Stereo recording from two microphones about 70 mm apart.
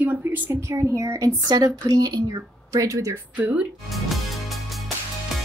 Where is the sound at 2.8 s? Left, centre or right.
Right.